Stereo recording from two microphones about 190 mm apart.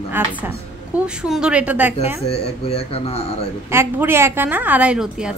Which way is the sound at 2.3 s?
30° left (ahead or behind).